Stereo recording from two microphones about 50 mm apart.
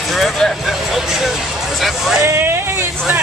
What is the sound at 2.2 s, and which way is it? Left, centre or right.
Speech, right.